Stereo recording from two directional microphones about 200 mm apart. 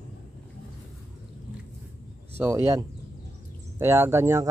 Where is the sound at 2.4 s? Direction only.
15° right (ahead or behind).